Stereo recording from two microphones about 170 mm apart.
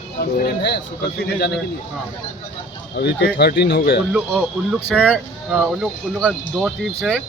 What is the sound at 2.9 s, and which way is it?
Speech, 70° left (ahead or behind).